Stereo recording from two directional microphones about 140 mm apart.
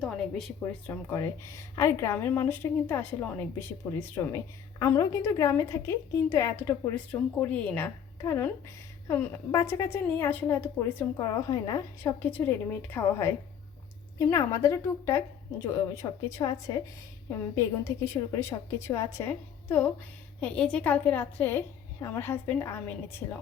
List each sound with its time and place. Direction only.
0.0 s a sound: centre (ahead or behind)
1.1 s a woman's voice: 20° left (ahead or behind)
11.2 s a woman's voice: 30° left (ahead or behind)
12.2 s a woman's voice: 15° left (ahead or behind)